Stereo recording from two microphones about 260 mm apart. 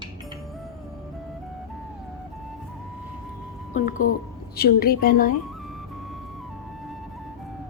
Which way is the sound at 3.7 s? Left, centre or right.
Left.